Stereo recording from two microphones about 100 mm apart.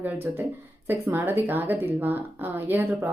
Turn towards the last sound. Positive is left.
turn(degrees=-25)  # may be behind; listen again after turning